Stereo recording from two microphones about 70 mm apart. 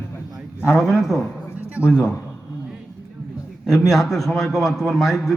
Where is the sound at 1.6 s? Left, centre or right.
Centre.